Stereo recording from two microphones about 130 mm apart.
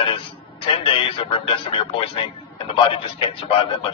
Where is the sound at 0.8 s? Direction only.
45° left (ahead or behind).